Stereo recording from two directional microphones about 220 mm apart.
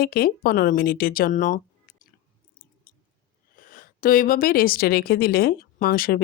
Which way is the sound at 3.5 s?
40° left (ahead or behind).